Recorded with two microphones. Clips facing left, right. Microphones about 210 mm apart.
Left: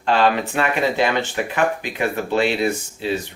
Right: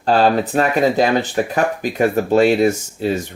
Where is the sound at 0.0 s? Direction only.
35° right (ahead or behind).